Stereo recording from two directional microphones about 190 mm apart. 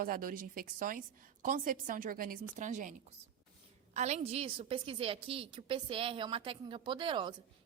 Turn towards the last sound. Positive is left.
turn(degrees=-25)  # may be behind; listen again after turning